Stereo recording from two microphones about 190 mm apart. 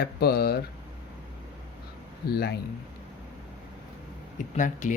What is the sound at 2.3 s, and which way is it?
Speech, 55° left (ahead or behind).